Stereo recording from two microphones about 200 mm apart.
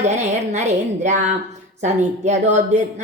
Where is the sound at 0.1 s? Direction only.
35° right (ahead or behind).